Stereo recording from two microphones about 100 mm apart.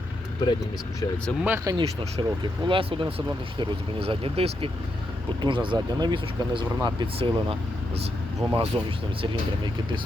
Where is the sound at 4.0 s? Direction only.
70° right (ahead or behind).